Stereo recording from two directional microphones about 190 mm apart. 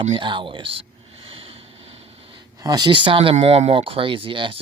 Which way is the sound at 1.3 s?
30° right (ahead or behind).